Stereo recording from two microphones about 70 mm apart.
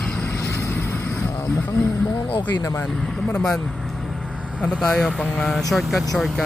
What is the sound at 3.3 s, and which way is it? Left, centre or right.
Speech, centre.